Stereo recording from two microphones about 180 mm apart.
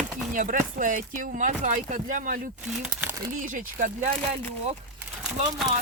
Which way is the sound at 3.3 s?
50° right (ahead or behind).